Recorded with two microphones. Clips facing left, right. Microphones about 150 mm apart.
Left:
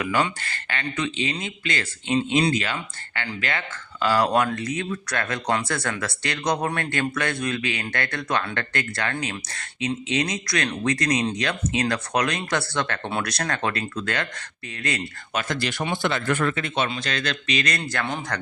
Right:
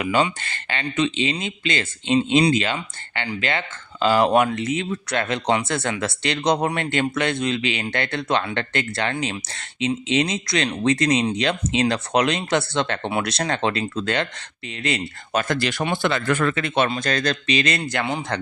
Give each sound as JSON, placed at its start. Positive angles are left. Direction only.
{"t": 0.0, "sound": "speech", "side_deg": -20}
{"t": 15.4, "sound": "speech", "side_deg": -80}
{"t": 16.9, "sound": "a man's voice", "side_deg": -45}